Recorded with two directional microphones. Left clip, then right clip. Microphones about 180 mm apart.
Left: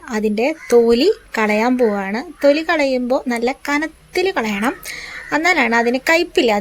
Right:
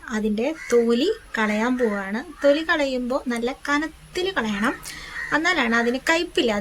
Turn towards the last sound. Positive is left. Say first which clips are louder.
# left 6 dB
turn(degrees=25)  # may be behind; listen again after turning